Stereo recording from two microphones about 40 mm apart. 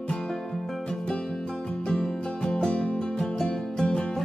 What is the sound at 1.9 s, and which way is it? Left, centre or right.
Music, left.